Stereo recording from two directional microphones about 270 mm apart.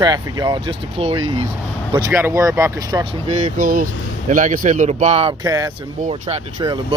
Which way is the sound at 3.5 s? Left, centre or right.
Right.